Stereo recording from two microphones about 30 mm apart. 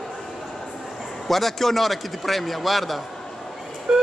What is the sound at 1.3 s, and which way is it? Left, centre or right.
A man's voice, centre.